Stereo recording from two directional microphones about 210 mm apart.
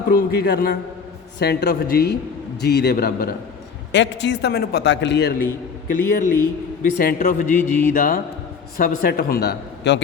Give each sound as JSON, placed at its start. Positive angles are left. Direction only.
{"t": 0.1, "sound": "a man's voice", "side_deg": 50}
{"t": 3.9, "sound": "a man's voice", "side_deg": 55}
{"t": 6.1, "sound": "a man's voice", "side_deg": 40}
{"t": 7.5, "sound": "speech", "side_deg": 10}
{"t": 7.9, "sound": "a man's voice", "side_deg": 45}